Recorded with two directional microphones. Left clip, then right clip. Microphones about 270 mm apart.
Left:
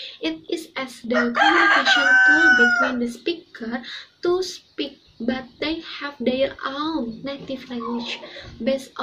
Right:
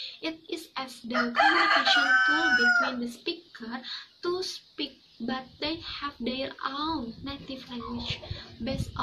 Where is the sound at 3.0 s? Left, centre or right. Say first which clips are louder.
Left 8 dB; centre.